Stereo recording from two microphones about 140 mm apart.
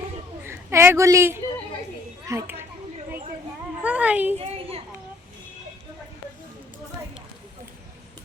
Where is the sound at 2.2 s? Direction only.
20° right (ahead or behind).